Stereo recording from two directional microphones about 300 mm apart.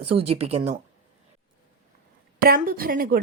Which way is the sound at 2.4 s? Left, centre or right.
Right.